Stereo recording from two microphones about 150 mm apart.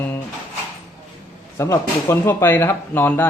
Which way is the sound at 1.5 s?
20° left (ahead or behind).